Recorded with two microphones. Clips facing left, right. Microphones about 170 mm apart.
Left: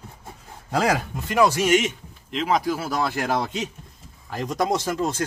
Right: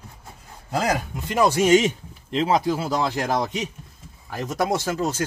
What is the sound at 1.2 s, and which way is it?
Speech, 25° right (ahead or behind).